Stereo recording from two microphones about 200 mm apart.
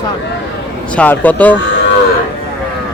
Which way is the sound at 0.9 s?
5° left (ahead or behind).